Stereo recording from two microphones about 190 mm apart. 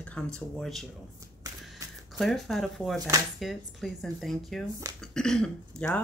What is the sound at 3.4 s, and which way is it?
Speech, centre (ahead or behind).